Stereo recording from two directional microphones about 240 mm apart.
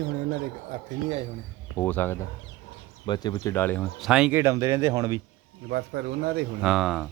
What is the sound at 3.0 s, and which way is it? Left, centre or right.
Speech, centre.